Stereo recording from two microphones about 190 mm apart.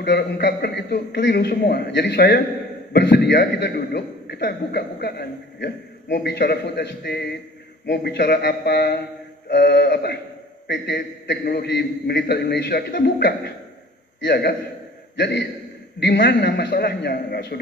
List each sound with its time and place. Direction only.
0.0 s a man's voice: 65° left (ahead or behind)